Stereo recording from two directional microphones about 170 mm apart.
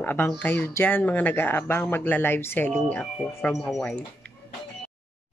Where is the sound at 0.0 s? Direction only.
10° left (ahead or behind).